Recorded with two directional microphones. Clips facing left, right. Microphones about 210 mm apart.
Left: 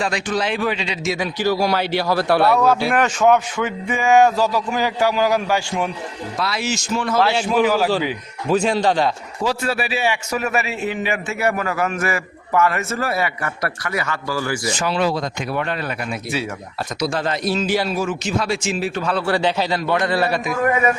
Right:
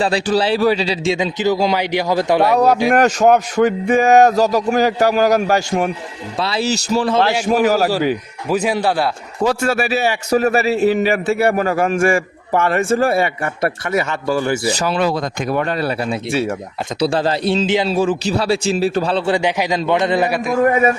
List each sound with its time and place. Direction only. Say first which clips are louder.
0.0 s a man's voice: right 5 dB; 35° right (ahead or behind)
1.1 s speech: right 1 dB; 20° right (ahead or behind)
2.9 s a man's voice: right 3 dB; 40° right (ahead or behind)
6.4 s a man's voice: right 5 dB; 30° right (ahead or behind)
7.4 s speech: right 3 dB; 45° right (ahead or behind)
8.4 s speech: even; 10° right (ahead or behind)
9.4 s a man's voice: right 5 dB; 50° right (ahead or behind); by 14.7 s 25° right (ahead or behind)
14.7 s a man's voice: right 3 dB; 40° right (ahead or behind)
14.9 s a man's voice: right 2 dB; 55° right (ahead or behind); by 20.4 s 15° right (ahead or behind)